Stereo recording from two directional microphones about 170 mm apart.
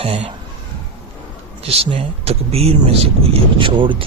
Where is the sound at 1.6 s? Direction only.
35° right (ahead or behind).